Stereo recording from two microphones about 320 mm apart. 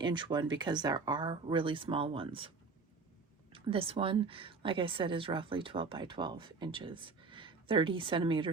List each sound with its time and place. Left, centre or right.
0.0 s a woman's voice: centre
3.5 s a woman's voice: centre